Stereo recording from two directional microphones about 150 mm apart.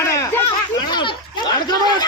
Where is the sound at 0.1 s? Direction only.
20° left (ahead or behind).